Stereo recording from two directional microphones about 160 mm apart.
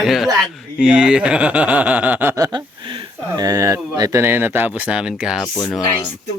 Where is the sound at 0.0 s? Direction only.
Centre (ahead or behind).